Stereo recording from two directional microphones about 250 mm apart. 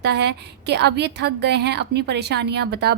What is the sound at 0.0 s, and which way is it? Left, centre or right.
A woman's voice, right.